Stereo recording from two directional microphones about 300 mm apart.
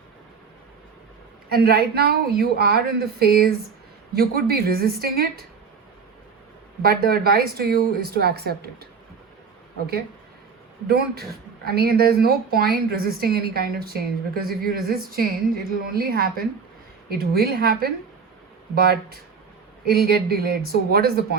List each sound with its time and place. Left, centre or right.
1.5 s speech: right
6.8 s speech: right
10.8 s speech: right